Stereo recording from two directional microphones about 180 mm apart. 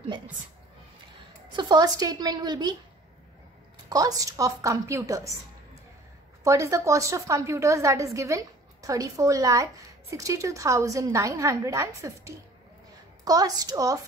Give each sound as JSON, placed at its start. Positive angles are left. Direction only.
{"t": 1.6, "sound": "a woman's voice", "side_deg": -20}
{"t": 3.9, "sound": "a woman's voice", "side_deg": -20}
{"t": 6.4, "sound": "a woman's voice", "side_deg": -15}